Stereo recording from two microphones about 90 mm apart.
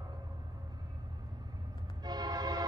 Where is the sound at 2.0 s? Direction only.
50° right (ahead or behind).